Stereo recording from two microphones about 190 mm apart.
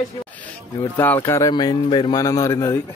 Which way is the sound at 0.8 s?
10° left (ahead or behind).